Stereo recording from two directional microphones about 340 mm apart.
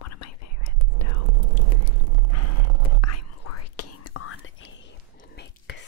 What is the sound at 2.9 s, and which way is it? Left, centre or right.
Whispering, left.